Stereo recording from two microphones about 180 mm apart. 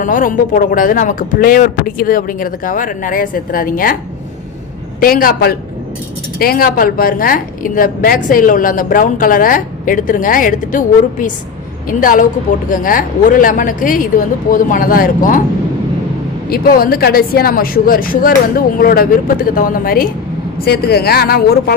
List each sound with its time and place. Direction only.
0.0 s a woman's voice: 50° left (ahead or behind)
4.9 s a woman's voice: 55° left (ahead or behind)
16.5 s a woman's voice: 55° left (ahead or behind)